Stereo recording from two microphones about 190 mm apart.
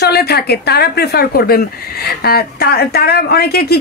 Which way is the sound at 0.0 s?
55° left (ahead or behind).